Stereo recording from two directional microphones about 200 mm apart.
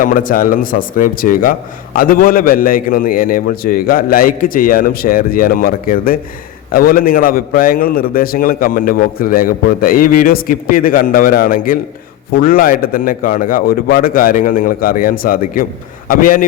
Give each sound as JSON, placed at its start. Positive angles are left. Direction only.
{"t": 0.0, "sound": "a man's voice", "side_deg": 45}